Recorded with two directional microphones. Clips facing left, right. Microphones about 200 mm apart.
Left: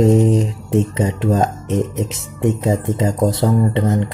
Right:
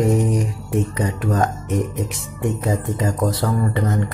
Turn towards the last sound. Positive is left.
turn(degrees=25)  # may be behind; listen again after turning